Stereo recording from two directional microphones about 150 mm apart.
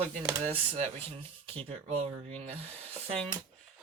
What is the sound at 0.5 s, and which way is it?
Speech, 40° right (ahead or behind).